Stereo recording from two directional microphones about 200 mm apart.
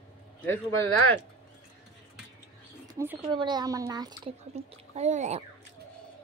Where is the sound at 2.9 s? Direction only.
10° right (ahead or behind).